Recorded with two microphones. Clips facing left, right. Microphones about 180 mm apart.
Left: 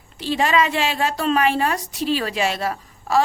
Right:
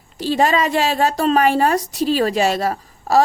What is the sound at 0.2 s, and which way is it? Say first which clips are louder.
Speech: right 3 dB; 40° right (ahead or behind).